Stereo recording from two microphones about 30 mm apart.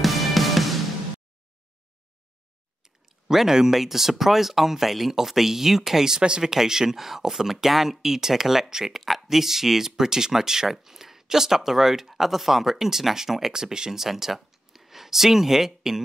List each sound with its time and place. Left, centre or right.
0.0 s music: centre
3.3 s speech: centre
13.9 s speech: centre